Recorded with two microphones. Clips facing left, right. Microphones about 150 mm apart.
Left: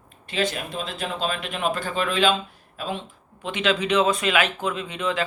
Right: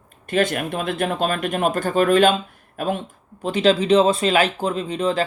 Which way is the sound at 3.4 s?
35° right (ahead or behind).